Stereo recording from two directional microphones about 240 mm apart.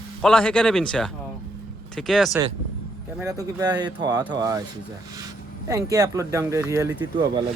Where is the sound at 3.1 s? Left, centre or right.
Centre.